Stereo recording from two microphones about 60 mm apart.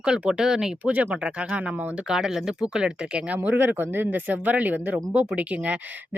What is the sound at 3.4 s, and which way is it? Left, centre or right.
Speech, right.